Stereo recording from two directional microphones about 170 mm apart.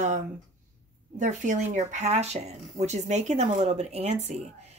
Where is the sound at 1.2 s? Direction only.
45° right (ahead or behind).